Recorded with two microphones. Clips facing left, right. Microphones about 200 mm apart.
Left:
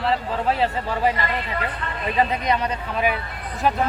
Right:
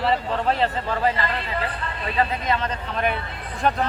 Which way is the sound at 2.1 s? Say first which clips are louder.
Left 2 dB; 15° left (ahead or behind).